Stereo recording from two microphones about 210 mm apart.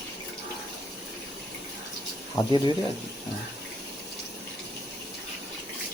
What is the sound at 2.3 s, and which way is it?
Speech, 20° left (ahead or behind).